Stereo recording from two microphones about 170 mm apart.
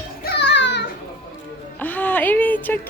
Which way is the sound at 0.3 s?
85° left.